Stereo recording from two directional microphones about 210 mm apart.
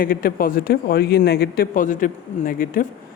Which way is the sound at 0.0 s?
45° left (ahead or behind).